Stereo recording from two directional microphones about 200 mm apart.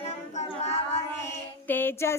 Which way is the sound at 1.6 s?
10° left (ahead or behind).